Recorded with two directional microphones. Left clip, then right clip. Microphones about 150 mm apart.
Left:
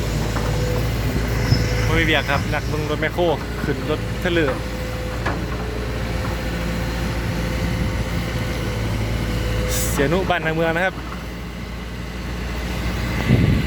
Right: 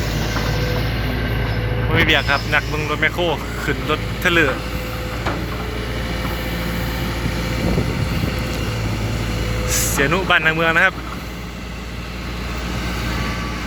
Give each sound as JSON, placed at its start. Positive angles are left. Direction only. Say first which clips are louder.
{"t": 2.0, "sound": "speech", "louder": "right 4 dB", "side_deg": 15}
{"t": 3.8, "sound": "speech", "louder": "right 7 dB", "side_deg": 10}
{"t": 9.6, "sound": "speech", "louder": "right 3 dB", "side_deg": 25}